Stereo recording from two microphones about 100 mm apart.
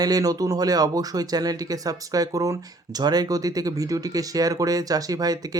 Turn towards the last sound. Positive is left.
turn(degrees=-40)  # may be behind; listen again after turning